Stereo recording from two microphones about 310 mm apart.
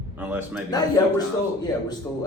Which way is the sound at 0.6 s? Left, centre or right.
Centre.